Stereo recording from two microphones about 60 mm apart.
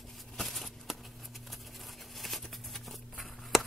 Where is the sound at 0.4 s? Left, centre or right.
Centre.